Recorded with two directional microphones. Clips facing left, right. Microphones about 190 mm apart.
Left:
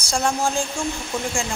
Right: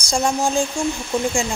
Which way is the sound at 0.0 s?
15° right (ahead or behind).